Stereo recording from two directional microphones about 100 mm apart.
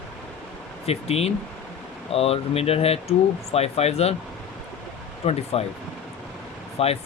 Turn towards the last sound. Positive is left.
turn(degrees=80)